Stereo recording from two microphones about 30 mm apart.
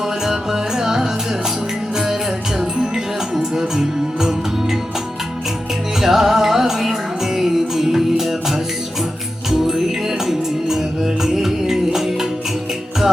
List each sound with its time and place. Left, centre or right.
0.3 s music: centre
2.6 s music: centre
6.0 s music: centre
9.5 s music: centre